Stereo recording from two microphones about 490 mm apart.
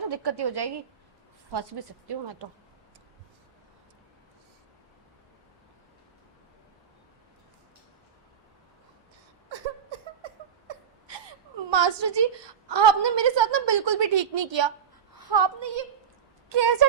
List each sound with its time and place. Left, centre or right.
0.1 s a woman's voice: right
9.9 s a sound: right
11.7 s a woman's voice: right